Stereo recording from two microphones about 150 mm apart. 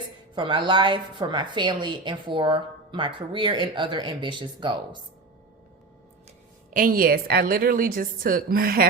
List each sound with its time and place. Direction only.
0.3 s a woman's voice: 30° right (ahead or behind)
6.7 s a woman's voice: 65° right (ahead or behind)